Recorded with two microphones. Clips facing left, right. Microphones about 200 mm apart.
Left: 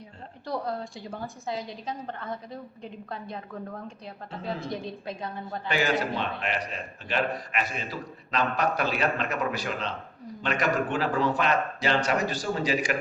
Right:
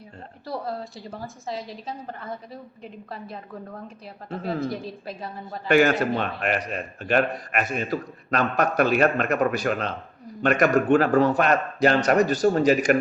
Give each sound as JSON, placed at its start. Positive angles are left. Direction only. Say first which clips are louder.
{"t": 0.4, "sound": "a woman's voice", "louder": "even", "side_deg": -5}
{"t": 5.6, "sound": "a man's voice", "louder": "right 8 dB", "side_deg": -55}